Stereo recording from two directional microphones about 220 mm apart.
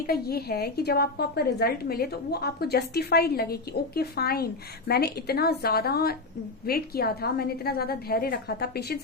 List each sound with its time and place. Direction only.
0.1 s a woman's voice: 45° left (ahead or behind)